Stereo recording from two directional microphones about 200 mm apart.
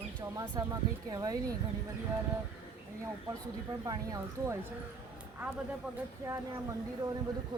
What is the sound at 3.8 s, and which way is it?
Speech, 15° right (ahead or behind).